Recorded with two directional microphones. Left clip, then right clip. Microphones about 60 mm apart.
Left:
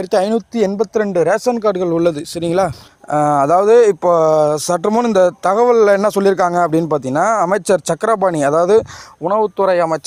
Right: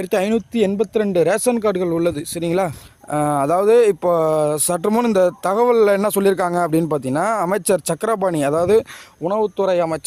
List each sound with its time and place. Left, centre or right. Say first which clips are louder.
0.0 s speech: left 4 dB; centre
1.1 s speech: left 2 dB; right
1.9 s speech: left 4 dB; left
2.3 s speech: left 4 dB; left
3.1 s speech: left 5 dB; centre
4.9 s speech: left 2 dB; centre
5.1 s speech: left 6 dB; centre